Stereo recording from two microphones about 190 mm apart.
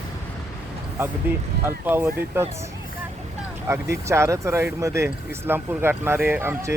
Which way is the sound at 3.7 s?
15° right (ahead or behind).